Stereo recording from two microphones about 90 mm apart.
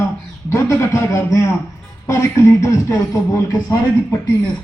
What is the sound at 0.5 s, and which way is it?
A man's voice, 25° left (ahead or behind).